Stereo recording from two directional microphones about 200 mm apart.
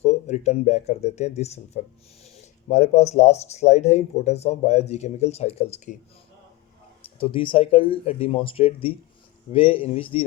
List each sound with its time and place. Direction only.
0.0 s speech: 35° left (ahead or behind)
7.2 s speech: 25° left (ahead or behind)